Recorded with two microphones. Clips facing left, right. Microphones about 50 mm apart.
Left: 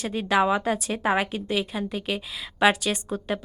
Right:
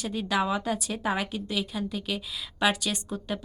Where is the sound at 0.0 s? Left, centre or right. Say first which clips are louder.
Left 5 dB; left.